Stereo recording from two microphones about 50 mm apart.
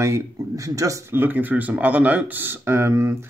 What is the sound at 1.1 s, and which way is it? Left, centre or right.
Speech, right.